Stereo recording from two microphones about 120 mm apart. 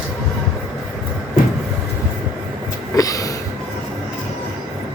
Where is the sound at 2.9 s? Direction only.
30° left (ahead or behind).